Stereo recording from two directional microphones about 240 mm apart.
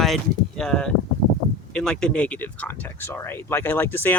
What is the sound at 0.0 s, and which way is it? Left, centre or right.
Speech, centre.